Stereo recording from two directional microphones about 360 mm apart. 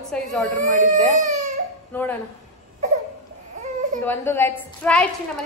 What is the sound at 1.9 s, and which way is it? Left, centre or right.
Speech, centre.